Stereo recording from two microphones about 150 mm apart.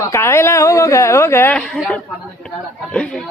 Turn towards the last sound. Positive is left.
turn(degrees=5)  # may be behind; listen again after turning